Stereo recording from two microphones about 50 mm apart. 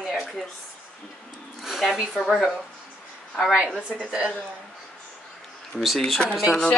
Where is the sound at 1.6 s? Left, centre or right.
Centre.